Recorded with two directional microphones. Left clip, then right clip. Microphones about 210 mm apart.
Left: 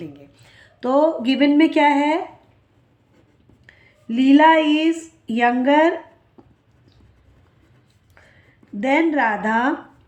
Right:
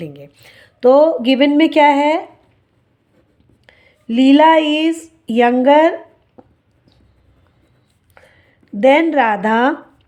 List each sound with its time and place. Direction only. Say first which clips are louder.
0.0 s speech: right 6 dB; 45° right (ahead or behind)
3.7 s speech: right 5 dB; 40° right (ahead or behind)
6.4 s a sound: right 9 dB; 40° right (ahead or behind)
8.1 s speech: right 4 dB; 40° right (ahead or behind)